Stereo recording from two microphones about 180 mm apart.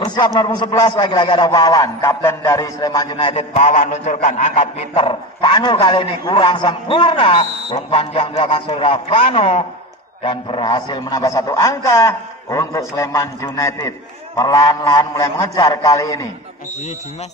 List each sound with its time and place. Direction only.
0.0 s a man's voice: 25° left (ahead or behind)